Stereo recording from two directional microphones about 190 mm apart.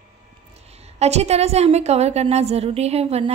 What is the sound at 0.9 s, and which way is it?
A woman's voice, 35° right (ahead or behind).